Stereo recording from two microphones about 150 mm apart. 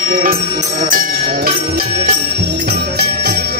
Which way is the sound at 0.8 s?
80° right.